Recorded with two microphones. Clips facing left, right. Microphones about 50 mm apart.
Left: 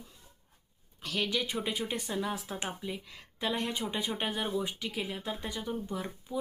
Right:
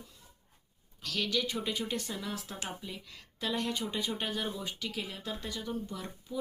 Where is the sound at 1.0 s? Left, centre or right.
Left.